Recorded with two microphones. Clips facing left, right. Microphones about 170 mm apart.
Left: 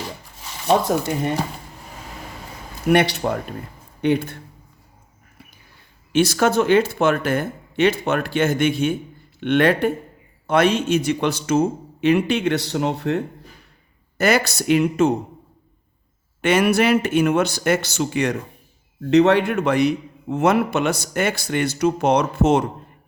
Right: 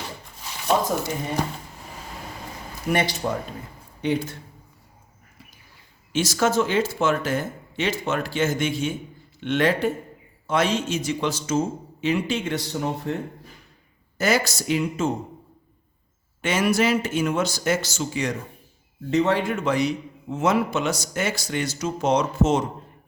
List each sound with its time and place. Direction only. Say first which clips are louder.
2.9 s a man's voice: left 6 dB; 65° left (ahead or behind)
6.1 s a man's voice: left 4 dB; 60° left (ahead or behind)
16.4 s a man's voice: left 4 dB; 60° left (ahead or behind)